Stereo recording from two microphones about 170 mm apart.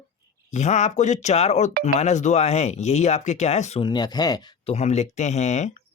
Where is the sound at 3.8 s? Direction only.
25° left (ahead or behind).